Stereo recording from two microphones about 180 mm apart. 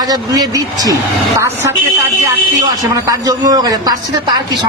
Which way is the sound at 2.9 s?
20° right (ahead or behind).